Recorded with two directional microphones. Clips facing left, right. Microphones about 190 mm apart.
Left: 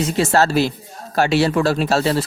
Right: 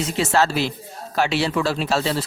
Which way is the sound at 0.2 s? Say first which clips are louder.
Left 3 dB; 40° left (ahead or behind).